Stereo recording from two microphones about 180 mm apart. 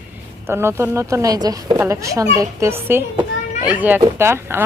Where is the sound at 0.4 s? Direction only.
15° right (ahead or behind).